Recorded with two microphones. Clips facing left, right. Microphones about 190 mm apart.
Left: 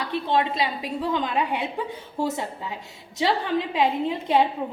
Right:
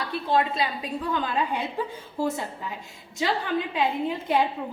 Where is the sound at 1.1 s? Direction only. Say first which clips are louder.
Left 1 dB; 15° left (ahead or behind).